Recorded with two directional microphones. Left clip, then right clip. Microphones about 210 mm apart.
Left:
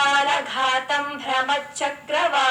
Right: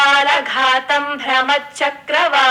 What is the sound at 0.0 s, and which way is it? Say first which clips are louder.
A woman's voice: right 6 dB; 20° right (ahead or behind).